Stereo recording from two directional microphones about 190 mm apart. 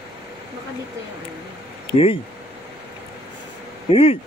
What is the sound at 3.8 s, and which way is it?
Speech, 30° left (ahead or behind).